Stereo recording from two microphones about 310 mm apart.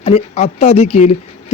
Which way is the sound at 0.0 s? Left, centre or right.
Left.